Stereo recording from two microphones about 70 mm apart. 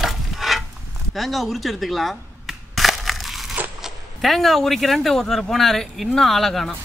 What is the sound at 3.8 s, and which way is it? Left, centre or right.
Speech, centre.